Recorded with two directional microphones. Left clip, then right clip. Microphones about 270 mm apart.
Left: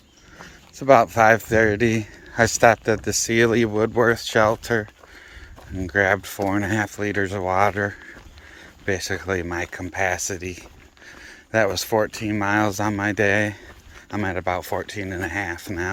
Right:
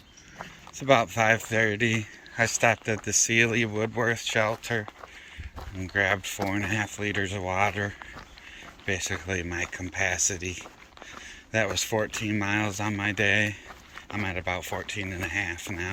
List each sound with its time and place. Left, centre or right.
0.9 s speech: centre
9.2 s speech: centre
11.5 s speech: centre